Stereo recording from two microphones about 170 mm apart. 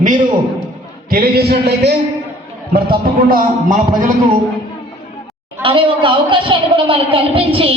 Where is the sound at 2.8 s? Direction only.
60° right (ahead or behind).